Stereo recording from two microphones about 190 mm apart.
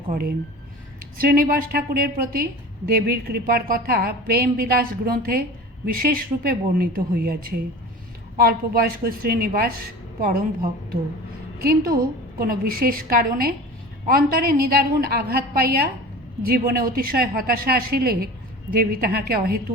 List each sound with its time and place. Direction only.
0.1 s a woman's voice: 50° right (ahead or behind)
11.6 s a woman's voice: 55° right (ahead or behind)